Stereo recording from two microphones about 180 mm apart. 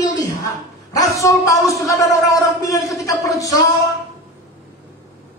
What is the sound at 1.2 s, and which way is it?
A woman's voice, 20° left (ahead or behind).